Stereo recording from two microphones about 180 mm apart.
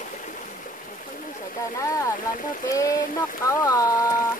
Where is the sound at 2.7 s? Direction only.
20° left (ahead or behind).